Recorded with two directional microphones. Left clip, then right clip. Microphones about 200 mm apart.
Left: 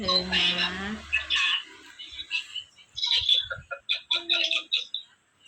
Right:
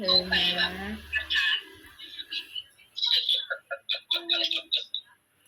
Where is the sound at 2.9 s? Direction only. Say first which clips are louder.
Left 2 dB; 5° right (ahead or behind).